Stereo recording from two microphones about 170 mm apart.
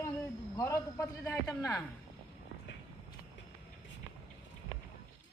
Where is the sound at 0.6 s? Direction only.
15° left (ahead or behind).